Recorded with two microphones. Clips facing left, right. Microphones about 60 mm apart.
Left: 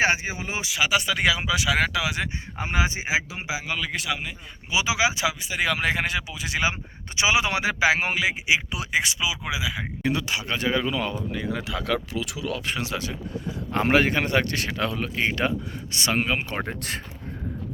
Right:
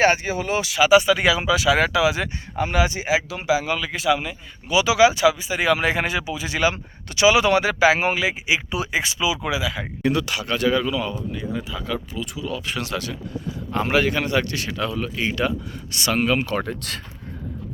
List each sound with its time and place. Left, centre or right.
0.0 s speech: centre
0.8 s speech: centre
2.6 s speech: left; by 4.4 s centre
4.7 s speech: centre
7.2 s speech: centre
10.9 s speech: left
11.3 s speech: left
12.1 s speech: left
12.9 s speech: centre
13.7 s speech: left